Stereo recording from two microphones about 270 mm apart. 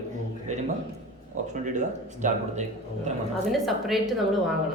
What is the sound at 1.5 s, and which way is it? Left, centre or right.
Speech, right.